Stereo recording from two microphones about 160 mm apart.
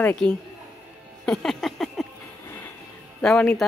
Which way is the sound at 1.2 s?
Centre (ahead or behind).